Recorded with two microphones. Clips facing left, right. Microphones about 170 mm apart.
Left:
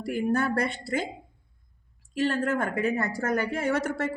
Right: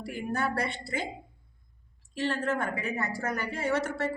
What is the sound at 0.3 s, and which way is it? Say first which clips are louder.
Speech: left 4 dB; 50° left (ahead or behind).